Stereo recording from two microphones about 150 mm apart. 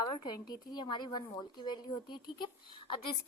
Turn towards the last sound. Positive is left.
turn(degrees=30)  # may be behind; listen again after turning